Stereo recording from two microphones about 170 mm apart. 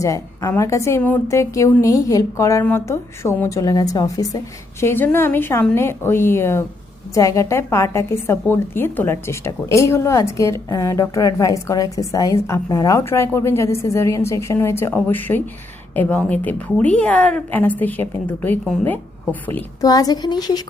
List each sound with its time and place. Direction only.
0.0 s a woman's voice: 15° left (ahead or behind)
19.8 s a woman's voice: 20° left (ahead or behind)